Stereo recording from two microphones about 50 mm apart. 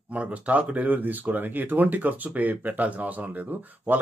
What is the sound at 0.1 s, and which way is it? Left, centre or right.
Speech, right.